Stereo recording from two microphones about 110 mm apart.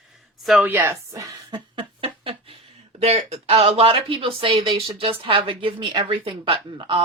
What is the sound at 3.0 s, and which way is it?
A woman's voice, 75° right (ahead or behind).